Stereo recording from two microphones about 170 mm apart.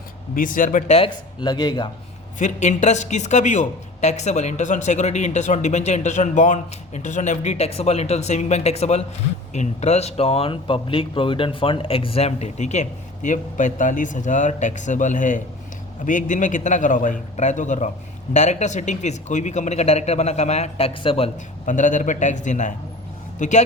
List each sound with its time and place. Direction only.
0.3 s speech: 55° left (ahead or behind); by 1.9 s 25° left (ahead or behind)
2.4 s speech: 45° left (ahead or behind)
21.7 s speech: 50° left (ahead or behind)